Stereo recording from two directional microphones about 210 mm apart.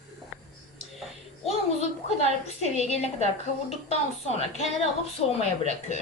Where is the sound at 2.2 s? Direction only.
30° left (ahead or behind).